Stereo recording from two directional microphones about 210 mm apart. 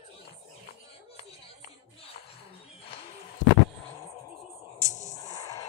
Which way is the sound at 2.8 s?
25° left (ahead or behind).